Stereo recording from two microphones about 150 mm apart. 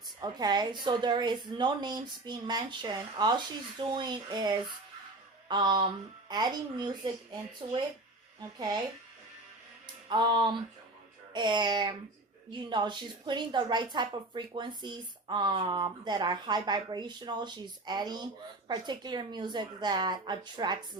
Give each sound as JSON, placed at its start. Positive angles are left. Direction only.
{"t": 0.2, "sound": "a woman's voice", "side_deg": -25}
{"t": 8.5, "sound": "a woman's voice", "side_deg": -25}
{"t": 10.1, "sound": "a woman's voice", "side_deg": -30}